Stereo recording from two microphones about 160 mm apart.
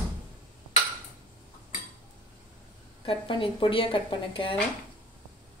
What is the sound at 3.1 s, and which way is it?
Speech, 30° left (ahead or behind).